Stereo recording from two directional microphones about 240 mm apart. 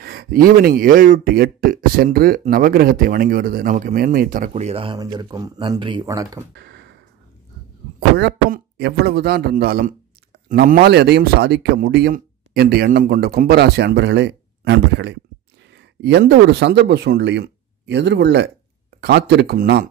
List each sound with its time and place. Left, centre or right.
0.0 s speech: right; by 6.4 s centre
6.5 s computer keyboard: right
8.2 s speech: right